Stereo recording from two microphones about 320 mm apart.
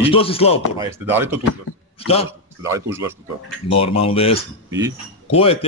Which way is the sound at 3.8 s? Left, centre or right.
Centre.